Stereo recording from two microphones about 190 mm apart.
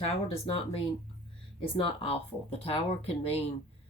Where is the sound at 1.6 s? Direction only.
30° left (ahead or behind).